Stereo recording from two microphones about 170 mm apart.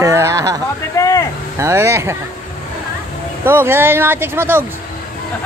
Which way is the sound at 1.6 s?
15° right (ahead or behind).